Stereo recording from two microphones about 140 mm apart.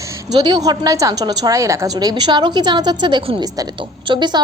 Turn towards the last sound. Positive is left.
turn(degrees=-35)  # may be behind; listen again after turning